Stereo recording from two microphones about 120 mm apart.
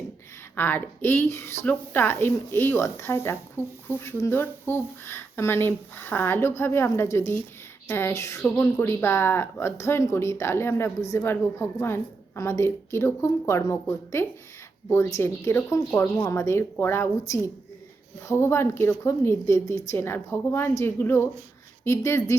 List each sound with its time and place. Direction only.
0.5 s a woman's voice: 15° left (ahead or behind)